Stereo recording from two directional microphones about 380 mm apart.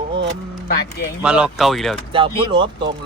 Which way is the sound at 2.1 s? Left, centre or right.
Centre.